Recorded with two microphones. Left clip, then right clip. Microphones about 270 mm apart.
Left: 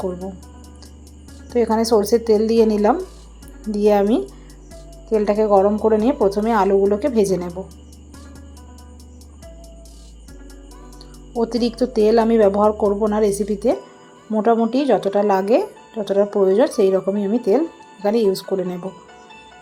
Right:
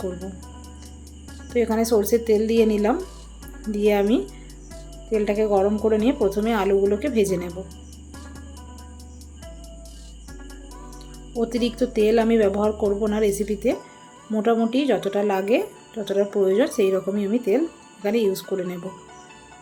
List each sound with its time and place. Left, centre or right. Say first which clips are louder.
0.0 s speech: left 5 dB; centre
1.5 s speech: left 4 dB; centre
11.3 s speech: left 3 dB; centre